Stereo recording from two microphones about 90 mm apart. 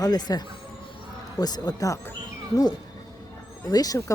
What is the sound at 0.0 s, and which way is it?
Speech, 50° left (ahead or behind).